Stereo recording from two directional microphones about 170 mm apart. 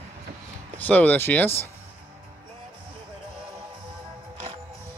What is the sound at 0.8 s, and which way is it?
Speech, 10° left (ahead or behind).